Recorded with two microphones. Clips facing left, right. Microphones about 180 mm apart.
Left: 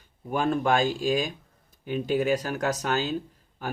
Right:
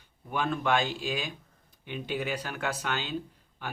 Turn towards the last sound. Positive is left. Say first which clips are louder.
# left 6 dB
turn(degrees=40)  # may be behind; listen again after turning